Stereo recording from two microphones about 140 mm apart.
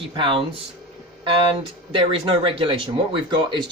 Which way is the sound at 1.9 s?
35° right (ahead or behind).